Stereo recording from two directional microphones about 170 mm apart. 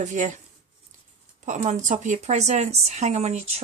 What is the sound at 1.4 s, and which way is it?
A woman's voice, 45° right (ahead or behind).